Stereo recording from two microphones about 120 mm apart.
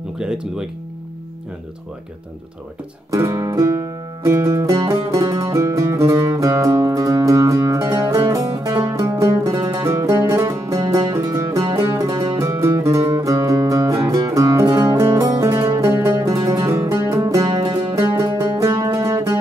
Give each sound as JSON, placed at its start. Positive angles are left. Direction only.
{"t": 0.2, "sound": "speech", "side_deg": -5}
{"t": 3.1, "sound": "music", "side_deg": -30}
{"t": 17.2, "sound": "music", "side_deg": -35}